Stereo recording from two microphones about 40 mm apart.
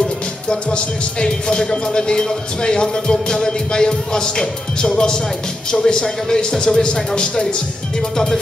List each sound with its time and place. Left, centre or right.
0.5 s speech: left